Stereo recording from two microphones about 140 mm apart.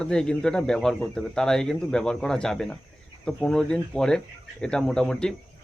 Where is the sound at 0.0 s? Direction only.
5° left (ahead or behind).